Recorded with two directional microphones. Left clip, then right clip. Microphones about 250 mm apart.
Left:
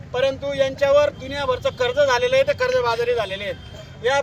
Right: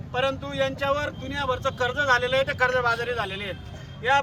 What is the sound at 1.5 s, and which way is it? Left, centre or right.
Speech, centre.